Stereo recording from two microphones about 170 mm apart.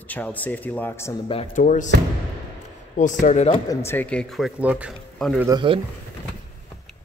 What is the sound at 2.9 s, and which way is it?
Speech, 50° left (ahead or behind).